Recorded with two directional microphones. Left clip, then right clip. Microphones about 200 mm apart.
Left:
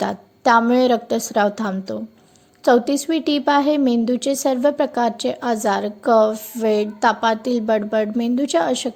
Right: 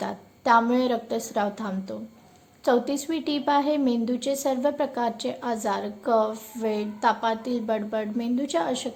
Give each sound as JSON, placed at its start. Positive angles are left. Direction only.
{"t": 0.0, "sound": "a woman's voice", "side_deg": 35}